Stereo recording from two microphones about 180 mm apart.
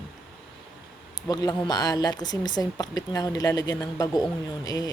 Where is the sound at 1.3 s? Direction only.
20° left (ahead or behind).